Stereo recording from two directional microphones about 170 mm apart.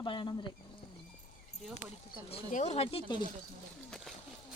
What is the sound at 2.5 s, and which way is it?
Speech, 45° left (ahead or behind).